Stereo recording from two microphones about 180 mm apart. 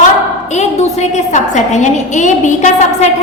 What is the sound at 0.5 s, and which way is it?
A woman's voice, 40° left (ahead or behind).